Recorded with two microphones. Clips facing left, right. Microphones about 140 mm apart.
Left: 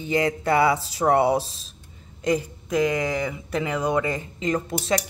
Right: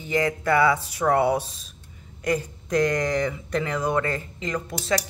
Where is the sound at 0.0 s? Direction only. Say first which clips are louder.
Left 1 dB; 20° left (ahead or behind).